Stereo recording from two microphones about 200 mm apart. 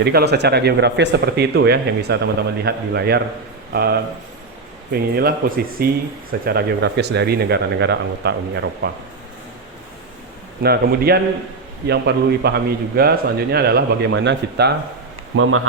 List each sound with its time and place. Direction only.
0.0 s a man's voice: 55° right (ahead or behind)
10.6 s a man's voice: 50° right (ahead or behind)
15.4 s speech: 90° right